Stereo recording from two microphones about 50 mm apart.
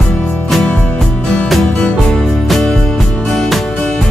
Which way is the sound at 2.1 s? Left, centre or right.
Centre.